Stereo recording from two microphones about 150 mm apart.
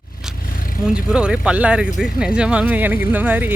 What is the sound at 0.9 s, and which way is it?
Speech, 5° right (ahead or behind).